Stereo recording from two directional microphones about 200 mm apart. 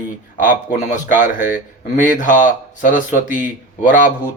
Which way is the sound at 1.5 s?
40° left (ahead or behind).